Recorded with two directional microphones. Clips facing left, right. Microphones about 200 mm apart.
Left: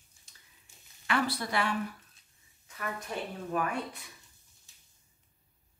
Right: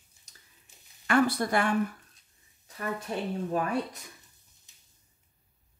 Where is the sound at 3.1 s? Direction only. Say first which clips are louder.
Right 4 dB; 25° right (ahead or behind).